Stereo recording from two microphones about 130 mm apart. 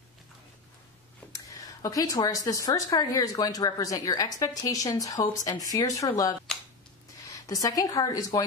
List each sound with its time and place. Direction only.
1.3 s a woman's voice: 25° left (ahead or behind)